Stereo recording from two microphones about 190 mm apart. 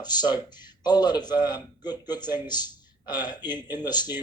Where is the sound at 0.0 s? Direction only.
20° left (ahead or behind).